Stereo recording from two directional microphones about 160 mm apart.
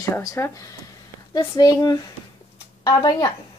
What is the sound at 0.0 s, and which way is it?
Speech, 20° left (ahead or behind).